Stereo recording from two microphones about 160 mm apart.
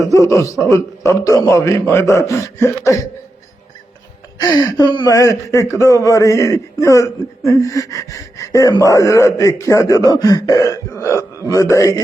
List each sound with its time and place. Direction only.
0.1 s speech: 20° left (ahead or behind)
4.4 s speech: 25° left (ahead or behind)